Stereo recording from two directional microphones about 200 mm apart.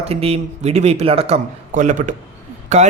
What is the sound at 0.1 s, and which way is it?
A man's voice, 30° right (ahead or behind).